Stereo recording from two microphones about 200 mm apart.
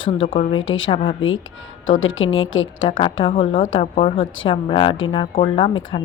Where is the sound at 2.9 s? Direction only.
25° left (ahead or behind).